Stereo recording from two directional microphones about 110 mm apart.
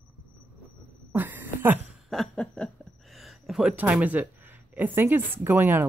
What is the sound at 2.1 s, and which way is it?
Speech, 5° left (ahead or behind).